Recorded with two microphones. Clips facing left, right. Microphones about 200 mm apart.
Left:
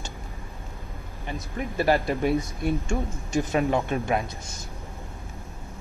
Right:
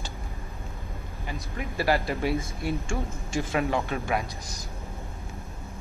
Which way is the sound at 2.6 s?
20° left (ahead or behind).